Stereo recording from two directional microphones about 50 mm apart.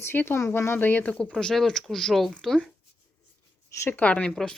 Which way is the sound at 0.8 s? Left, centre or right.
Left.